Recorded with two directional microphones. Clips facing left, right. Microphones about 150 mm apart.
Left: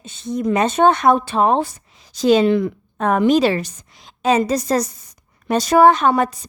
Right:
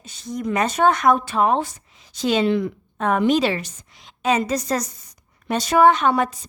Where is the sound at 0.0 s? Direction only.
25° left (ahead or behind).